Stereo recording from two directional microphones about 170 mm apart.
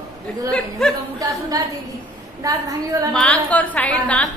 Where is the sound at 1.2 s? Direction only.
20° right (ahead or behind).